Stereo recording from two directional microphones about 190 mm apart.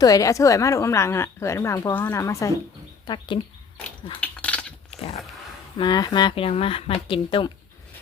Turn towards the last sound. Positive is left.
turn(degrees=25)  # may be behind; listen again after turning